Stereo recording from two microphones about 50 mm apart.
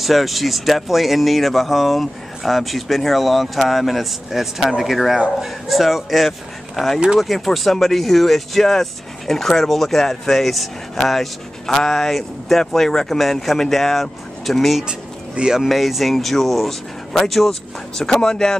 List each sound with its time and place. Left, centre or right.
0.0 s speech: centre
14.9 s a sound: centre
15.7 s speech: centre